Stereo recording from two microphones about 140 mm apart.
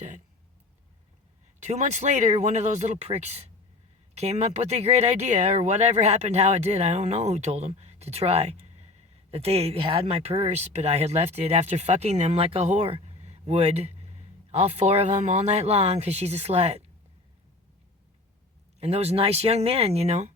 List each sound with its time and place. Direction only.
1.5 s speech: 55° right (ahead or behind)
18.8 s speech: 50° right (ahead or behind)